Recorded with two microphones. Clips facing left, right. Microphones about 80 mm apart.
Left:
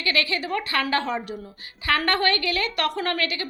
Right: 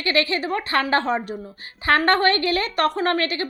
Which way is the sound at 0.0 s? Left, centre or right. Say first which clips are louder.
Right 4 dB; right.